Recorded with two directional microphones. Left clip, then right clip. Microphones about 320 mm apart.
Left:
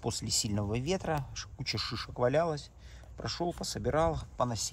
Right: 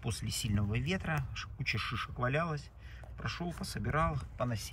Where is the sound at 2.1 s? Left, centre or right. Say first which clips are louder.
Left 7 dB; left.